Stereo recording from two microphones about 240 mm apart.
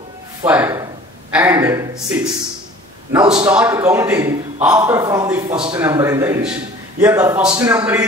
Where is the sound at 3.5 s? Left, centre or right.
Centre.